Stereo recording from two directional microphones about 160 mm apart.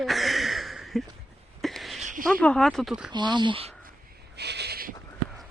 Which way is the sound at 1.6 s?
Centre (ahead or behind).